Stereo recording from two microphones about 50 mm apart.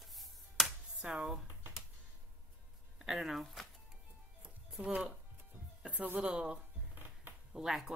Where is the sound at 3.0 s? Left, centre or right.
Centre.